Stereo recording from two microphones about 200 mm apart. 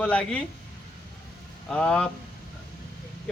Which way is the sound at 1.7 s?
5° left (ahead or behind).